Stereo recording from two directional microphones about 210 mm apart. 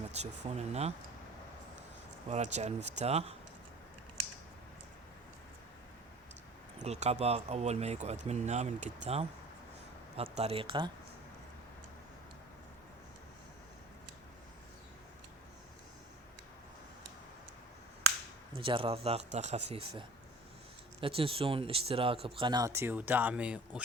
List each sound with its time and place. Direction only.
0.1 s speech: 30° right (ahead or behind)
2.3 s speech: 35° right (ahead or behind)
6.7 s speech: 30° right (ahead or behind)
10.3 s speech: 30° right (ahead or behind)
18.5 s speech: 25° right (ahead or behind); by 23.8 s 5° right (ahead or behind)